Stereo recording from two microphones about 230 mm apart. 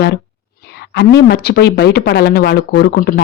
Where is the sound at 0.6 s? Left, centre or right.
Left.